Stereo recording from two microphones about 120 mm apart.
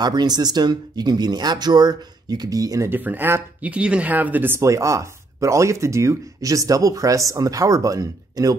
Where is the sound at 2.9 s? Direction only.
15° right (ahead or behind).